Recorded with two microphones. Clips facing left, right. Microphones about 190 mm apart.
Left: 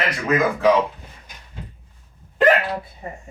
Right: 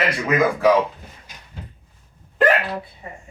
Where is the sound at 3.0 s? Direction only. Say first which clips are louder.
Left 4 dB; 40° left (ahead or behind).